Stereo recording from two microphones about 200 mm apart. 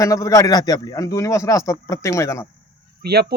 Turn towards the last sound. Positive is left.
turn(degrees=-55)  # may be behind; listen again after turning